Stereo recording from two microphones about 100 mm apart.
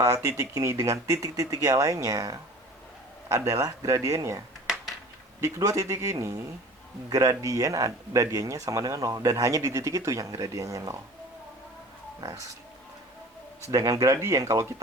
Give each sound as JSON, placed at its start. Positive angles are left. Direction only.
{"t": 0.0, "sound": "speech", "side_deg": -30}
{"t": 12.2, "sound": "speech", "side_deg": -30}
{"t": 13.7, "sound": "speech", "side_deg": -35}